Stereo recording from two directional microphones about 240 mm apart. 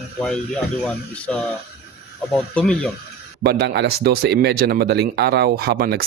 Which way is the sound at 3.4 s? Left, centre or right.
Right.